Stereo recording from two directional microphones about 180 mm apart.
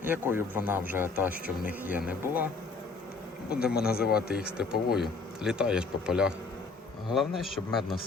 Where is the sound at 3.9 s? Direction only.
60° left (ahead or behind).